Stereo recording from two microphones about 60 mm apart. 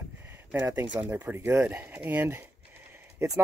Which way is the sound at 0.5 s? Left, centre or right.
Right.